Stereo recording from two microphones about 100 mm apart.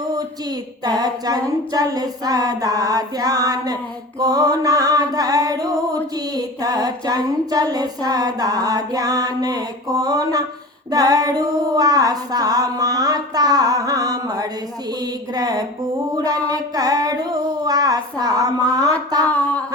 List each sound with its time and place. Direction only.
0.9 s female singing: 40° right (ahead or behind)